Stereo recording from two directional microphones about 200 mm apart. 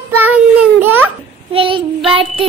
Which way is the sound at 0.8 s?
10° right (ahead or behind).